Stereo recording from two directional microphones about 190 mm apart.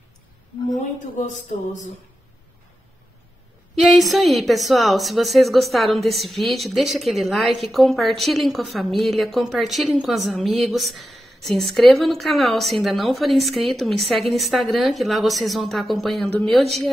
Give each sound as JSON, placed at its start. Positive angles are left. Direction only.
{"t": 1.1, "sound": "music", "side_deg": 40}
{"t": 3.9, "sound": "a woman's voice", "side_deg": 0}